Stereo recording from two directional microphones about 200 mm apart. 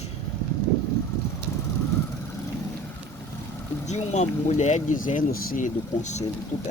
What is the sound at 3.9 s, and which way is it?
Speech, 35° left (ahead or behind).